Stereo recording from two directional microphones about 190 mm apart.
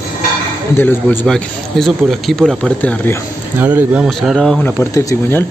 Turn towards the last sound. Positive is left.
turn(degrees=15)  # may be behind; listen again after turning